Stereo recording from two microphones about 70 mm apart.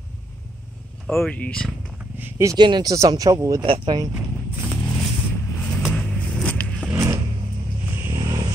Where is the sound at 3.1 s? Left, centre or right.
Right.